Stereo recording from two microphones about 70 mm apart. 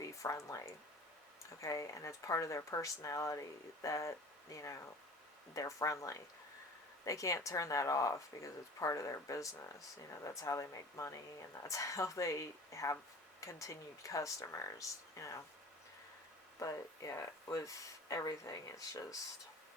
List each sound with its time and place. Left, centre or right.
0.0 s speech: left
16.6 s speech: left